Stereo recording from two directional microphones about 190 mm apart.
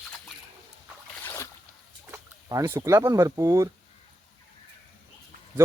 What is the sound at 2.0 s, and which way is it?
Speech, 15° right (ahead or behind).